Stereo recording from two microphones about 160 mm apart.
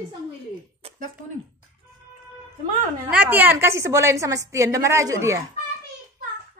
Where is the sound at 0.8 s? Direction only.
40° right (ahead or behind).